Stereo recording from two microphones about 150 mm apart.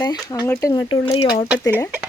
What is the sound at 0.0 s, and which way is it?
Speech, 25° left (ahead or behind).